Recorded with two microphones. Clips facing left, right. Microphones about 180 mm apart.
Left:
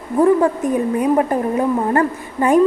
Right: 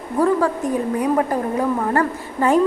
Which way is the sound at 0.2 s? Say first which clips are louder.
Left 4 dB; 20° left (ahead or behind).